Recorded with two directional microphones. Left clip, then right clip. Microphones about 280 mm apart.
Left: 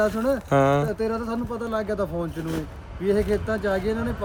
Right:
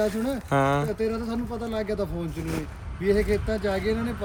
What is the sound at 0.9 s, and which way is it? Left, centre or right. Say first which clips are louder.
Speech: left 2 dB; left.